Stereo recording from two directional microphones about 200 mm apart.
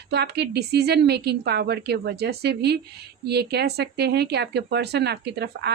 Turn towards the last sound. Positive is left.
turn(degrees=-55)  # may be behind; listen again after turning